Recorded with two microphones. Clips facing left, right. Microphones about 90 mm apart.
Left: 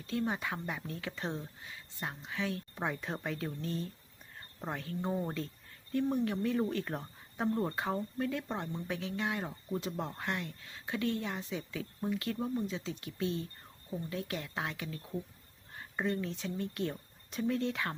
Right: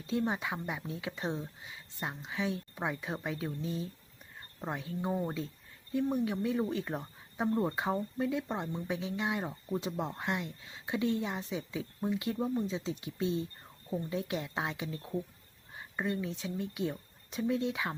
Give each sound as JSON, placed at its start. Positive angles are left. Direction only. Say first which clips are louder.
{"t": 0.1, "sound": "speech", "louder": "right 2 dB", "side_deg": -20}
{"t": 2.7, "sound": "speech", "louder": "right 1 dB", "side_deg": -5}
{"t": 15.7, "sound": "speech", "louder": "even", "side_deg": -10}